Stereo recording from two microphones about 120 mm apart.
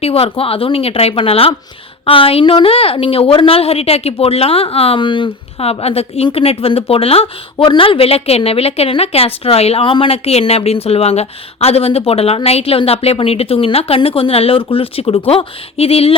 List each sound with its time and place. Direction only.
0.0 s a woman's voice: 55° left (ahead or behind)
5.8 s a woman's voice: 60° left (ahead or behind)
7.5 s a woman's voice: 40° left (ahead or behind)